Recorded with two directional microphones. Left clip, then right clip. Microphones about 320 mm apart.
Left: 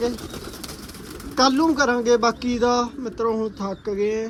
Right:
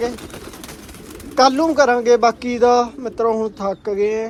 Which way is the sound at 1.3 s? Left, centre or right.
Centre.